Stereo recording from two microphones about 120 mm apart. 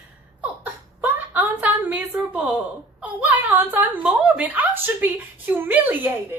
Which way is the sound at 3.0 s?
10° right (ahead or behind).